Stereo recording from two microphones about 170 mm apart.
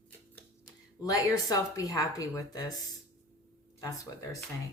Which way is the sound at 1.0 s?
20° left (ahead or behind).